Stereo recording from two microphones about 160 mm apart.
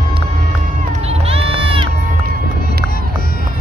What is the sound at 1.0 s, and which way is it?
Run, 35° right (ahead or behind).